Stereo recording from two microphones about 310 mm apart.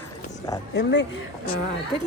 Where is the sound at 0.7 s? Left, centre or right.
Left.